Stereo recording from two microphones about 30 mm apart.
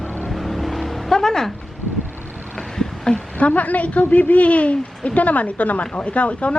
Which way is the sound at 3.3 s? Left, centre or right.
Left.